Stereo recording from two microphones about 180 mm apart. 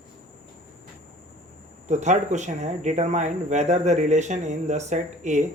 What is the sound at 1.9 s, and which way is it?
Speech, 40° right (ahead or behind).